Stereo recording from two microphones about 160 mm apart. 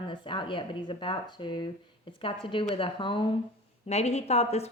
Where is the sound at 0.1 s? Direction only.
30° left (ahead or behind).